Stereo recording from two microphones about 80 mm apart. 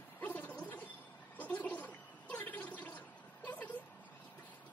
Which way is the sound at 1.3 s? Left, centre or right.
Centre.